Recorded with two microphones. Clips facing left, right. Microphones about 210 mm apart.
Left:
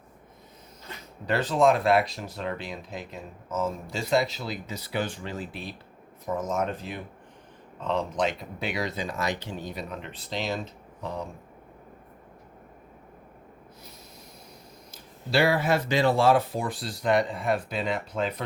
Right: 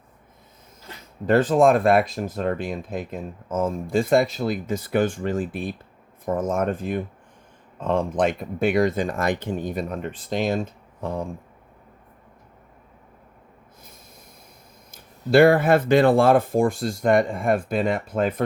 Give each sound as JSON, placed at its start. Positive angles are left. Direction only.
{"t": 1.2, "sound": "speech", "side_deg": -50}
{"t": 14.9, "sound": "speech", "side_deg": -50}